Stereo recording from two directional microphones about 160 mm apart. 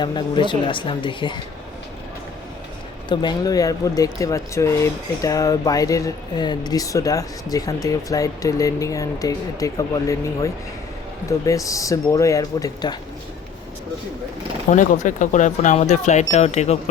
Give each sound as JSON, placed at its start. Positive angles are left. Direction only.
{"t": 0.0, "sound": "speech", "side_deg": 30}
{"t": 3.1, "sound": "speech", "side_deg": 25}
{"t": 14.7, "sound": "speech", "side_deg": 55}